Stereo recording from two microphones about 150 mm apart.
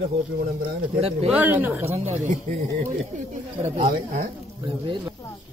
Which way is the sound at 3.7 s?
65° right (ahead or behind).